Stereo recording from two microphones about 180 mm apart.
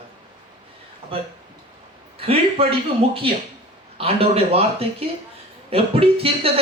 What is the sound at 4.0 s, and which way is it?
Speech, 35° right (ahead or behind).